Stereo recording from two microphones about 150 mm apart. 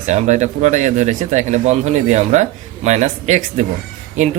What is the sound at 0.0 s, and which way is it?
Speech, 50° right (ahead or behind).